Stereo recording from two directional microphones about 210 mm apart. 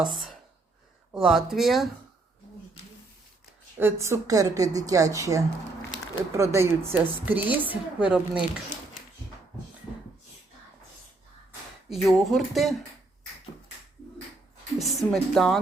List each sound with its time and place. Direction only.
1.1 s speech: centre (ahead or behind)
3.8 s a woman's voice: 10° right (ahead or behind)
11.9 s speech: centre (ahead or behind)
14.8 s speech: centre (ahead or behind)